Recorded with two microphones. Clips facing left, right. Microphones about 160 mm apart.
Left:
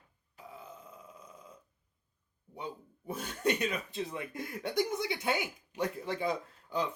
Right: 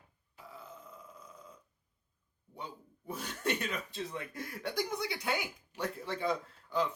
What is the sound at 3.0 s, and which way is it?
Speech, 15° left (ahead or behind).